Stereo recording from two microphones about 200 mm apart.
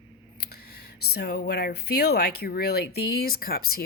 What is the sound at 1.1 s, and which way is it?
Speech, 55° left (ahead or behind).